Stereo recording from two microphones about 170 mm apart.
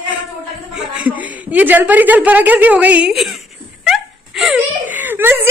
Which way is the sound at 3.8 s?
Centre (ahead or behind).